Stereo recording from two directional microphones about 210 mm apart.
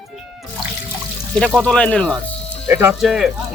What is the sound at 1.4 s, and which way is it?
Speech, 5° left (ahead or behind).